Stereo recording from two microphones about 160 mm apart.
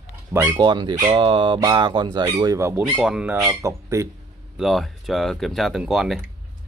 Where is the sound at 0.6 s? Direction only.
30° right (ahead or behind).